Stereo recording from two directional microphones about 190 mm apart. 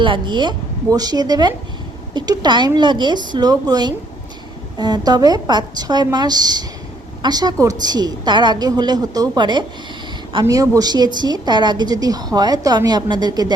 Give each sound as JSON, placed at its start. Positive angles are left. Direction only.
{"t": 0.0, "sound": "a woman's voice", "side_deg": -25}